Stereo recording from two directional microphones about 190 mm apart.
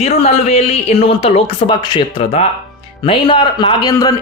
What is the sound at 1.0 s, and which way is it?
A man's voice, 30° left (ahead or behind).